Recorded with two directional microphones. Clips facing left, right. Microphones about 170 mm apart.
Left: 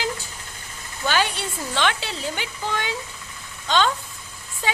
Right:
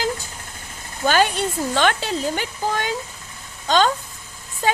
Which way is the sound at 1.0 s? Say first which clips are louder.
Right 5 dB; 45° right (ahead or behind).